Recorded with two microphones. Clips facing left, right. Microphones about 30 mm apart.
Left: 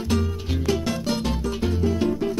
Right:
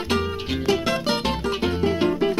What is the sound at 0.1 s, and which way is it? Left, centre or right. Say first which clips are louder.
Music: right 2 dB; right.